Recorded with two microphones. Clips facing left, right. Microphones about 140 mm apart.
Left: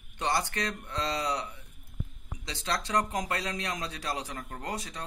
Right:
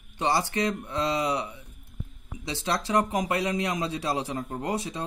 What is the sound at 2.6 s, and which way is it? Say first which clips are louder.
Speech: right 4 dB; 25° right (ahead or behind).